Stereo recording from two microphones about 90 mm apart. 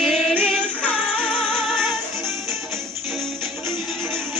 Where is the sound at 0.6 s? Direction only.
15° left (ahead or behind).